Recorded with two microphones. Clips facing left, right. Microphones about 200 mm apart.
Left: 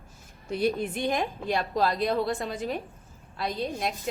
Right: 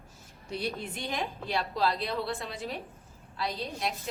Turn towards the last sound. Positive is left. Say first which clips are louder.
# left 4 dB
turn(degrees=50)  # may be behind; listen again after turning